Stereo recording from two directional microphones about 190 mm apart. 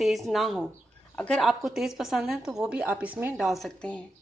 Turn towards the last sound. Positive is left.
turn(degrees=5)  # may be behind; listen again after turning